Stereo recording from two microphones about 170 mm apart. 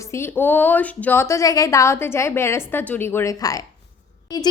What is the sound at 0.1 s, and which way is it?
A woman's voice, 15° left (ahead or behind).